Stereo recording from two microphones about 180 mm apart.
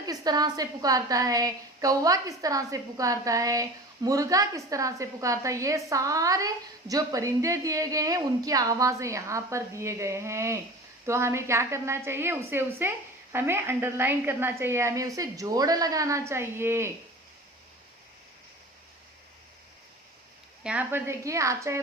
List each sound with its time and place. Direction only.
0.0 s a woman's voice: 20° right (ahead or behind)
20.7 s a woman's voice: 10° right (ahead or behind)